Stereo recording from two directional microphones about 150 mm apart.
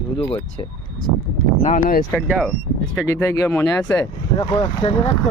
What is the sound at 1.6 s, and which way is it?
Speech, 60° left (ahead or behind).